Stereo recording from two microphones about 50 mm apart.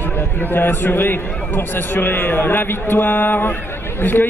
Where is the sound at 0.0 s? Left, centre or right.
Left.